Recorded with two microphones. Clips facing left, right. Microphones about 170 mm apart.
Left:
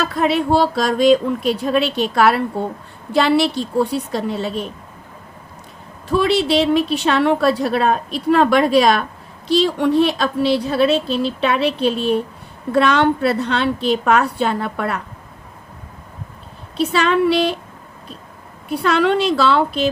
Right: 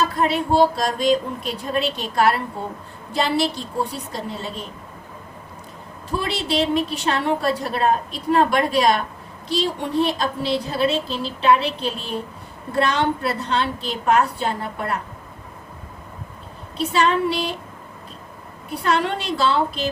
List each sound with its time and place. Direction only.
0.0 s a woman's voice: 80° left
3.1 s speech: 70° left (ahead or behind)
6.1 s a woman's voice: 70° left (ahead or behind); by 15.0 s 85° left
16.7 s speech: 80° left
18.8 s a woman's voice: 90° left; by 19.9 s 70° left (ahead or behind)